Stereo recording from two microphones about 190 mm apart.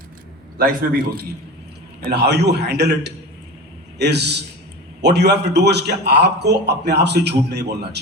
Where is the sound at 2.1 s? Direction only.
60° right (ahead or behind).